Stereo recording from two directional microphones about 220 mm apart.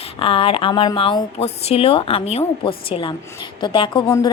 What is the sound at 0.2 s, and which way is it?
A woman's voice, 25° left (ahead or behind).